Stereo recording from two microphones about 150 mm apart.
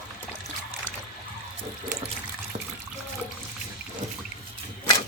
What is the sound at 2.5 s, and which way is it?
Water, 45° right (ahead or behind).